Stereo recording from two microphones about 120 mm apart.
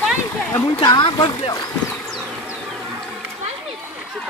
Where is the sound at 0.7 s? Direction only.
40° left (ahead or behind).